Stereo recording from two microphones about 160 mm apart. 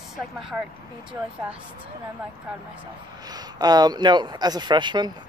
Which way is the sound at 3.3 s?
25° right (ahead or behind).